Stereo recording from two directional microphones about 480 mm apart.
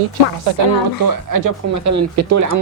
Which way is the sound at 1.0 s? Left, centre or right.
Right.